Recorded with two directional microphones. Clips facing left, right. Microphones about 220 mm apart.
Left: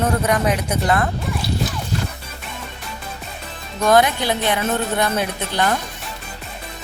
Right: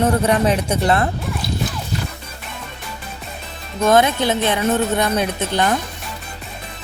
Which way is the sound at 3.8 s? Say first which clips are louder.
Right 1 dB; 20° right (ahead or behind).